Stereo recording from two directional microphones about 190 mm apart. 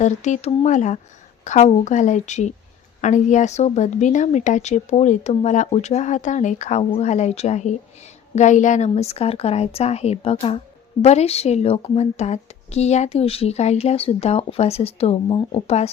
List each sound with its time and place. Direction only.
0.0 s a woman's voice: 40° left (ahead or behind)